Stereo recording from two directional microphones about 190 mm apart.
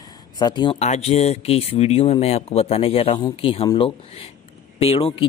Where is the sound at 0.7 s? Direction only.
35° left (ahead or behind).